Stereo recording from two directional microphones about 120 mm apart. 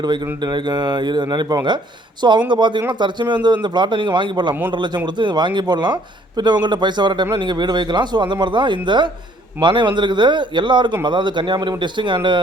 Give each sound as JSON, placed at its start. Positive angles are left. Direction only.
{"t": 0.4, "sound": "speech", "side_deg": -40}